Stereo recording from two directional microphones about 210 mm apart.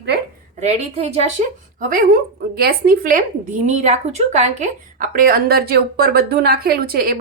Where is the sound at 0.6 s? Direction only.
30° right (ahead or behind).